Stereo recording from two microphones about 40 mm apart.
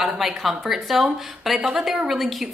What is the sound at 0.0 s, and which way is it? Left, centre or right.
A woman's voice, centre.